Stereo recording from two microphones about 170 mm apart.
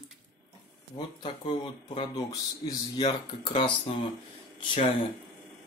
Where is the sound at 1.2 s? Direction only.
35° left (ahead or behind).